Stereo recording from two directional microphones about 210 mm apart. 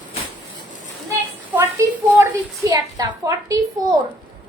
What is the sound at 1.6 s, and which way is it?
A woman's voice, 15° right (ahead or behind).